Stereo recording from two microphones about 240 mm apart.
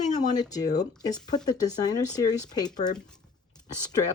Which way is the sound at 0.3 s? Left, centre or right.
Centre.